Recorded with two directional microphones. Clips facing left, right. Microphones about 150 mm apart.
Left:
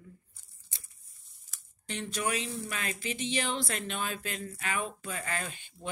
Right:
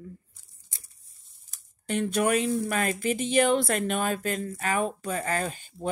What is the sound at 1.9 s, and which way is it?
Speech, 55° right (ahead or behind).